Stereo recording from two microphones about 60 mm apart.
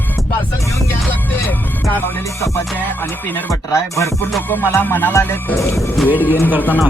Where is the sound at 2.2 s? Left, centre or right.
Left.